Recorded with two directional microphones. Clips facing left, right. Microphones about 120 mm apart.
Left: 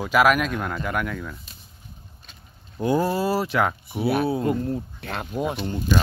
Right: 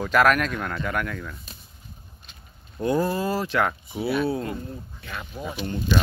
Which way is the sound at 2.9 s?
10° left (ahead or behind).